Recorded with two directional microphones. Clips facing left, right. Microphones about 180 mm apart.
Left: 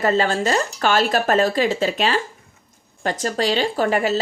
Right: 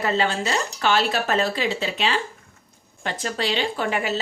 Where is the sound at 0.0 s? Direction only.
45° left (ahead or behind).